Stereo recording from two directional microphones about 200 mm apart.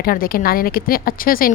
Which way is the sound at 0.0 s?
45° left (ahead or behind).